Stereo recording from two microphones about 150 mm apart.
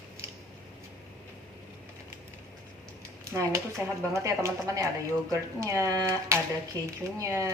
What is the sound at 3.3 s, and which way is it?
Speech, 20° right (ahead or behind).